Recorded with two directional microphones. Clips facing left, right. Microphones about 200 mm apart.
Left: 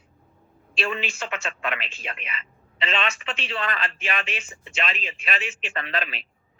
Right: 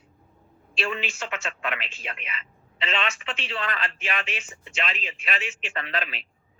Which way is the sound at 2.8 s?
40° left (ahead or behind).